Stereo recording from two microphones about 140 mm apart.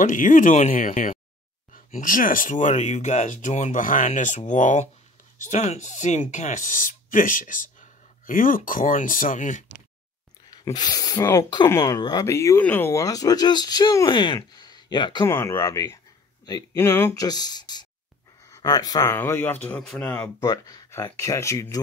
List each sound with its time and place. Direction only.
0.0 s speech: 70° left (ahead or behind)
10.5 s speech: 30° left (ahead or behind)
15.2 s speech: 20° left (ahead or behind)
19.0 s speech: 15° left (ahead or behind)
20.3 s speech: 25° left (ahead or behind)